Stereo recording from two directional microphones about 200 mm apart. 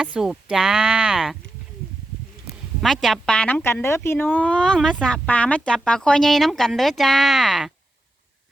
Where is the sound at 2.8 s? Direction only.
Centre (ahead or behind).